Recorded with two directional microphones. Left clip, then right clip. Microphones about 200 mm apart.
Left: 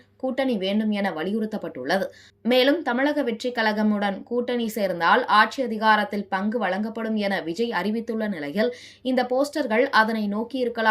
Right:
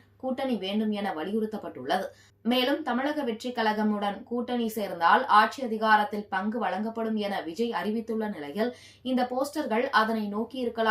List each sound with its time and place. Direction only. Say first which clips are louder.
0.3 s speech: left 7 dB; 35° left (ahead or behind)